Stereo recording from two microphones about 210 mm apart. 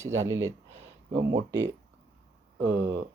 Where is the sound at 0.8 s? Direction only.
15° right (ahead or behind).